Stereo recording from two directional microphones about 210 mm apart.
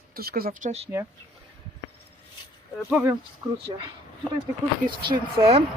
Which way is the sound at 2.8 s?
10° right (ahead or behind).